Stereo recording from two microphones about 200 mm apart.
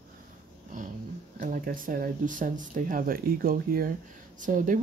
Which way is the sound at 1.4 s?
45° right (ahead or behind).